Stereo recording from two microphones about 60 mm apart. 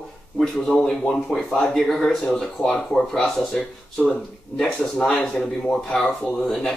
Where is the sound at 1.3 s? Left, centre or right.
Centre.